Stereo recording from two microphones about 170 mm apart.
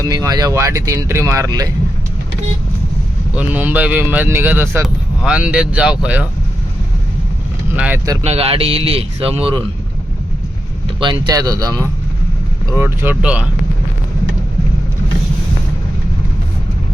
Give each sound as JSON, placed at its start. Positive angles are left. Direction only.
{"t": 0.1, "sound": "speech", "side_deg": -20}
{"t": 3.3, "sound": "speech", "side_deg": -10}
{"t": 7.8, "sound": "speech", "side_deg": -10}
{"t": 8.2, "sound": "speech", "side_deg": -35}
{"t": 11.0, "sound": "speech", "side_deg": -25}